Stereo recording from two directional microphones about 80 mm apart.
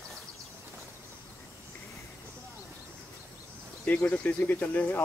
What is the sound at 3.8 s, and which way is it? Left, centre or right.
Speech, centre.